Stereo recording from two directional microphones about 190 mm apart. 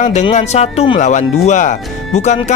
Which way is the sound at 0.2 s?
35° left (ahead or behind).